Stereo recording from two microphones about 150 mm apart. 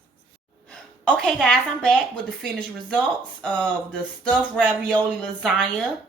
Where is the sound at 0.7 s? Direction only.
5° left (ahead or behind).